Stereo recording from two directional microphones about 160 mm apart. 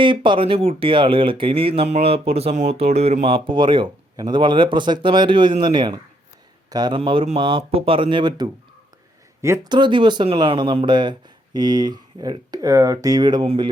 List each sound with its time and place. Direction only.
0.0 s speech: 30° right (ahead or behind)